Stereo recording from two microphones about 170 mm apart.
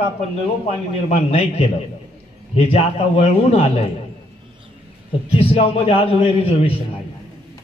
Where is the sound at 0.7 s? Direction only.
40° left (ahead or behind).